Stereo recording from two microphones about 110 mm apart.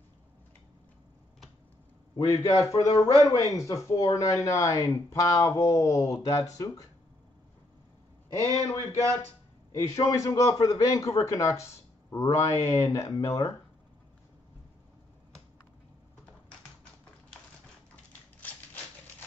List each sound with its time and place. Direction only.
2.1 s a man's voice: 30° left (ahead or behind)
8.3 s a man's voice: 25° left (ahead or behind)